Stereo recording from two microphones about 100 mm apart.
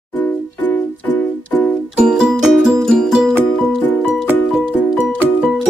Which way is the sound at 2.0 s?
10° right (ahead or behind).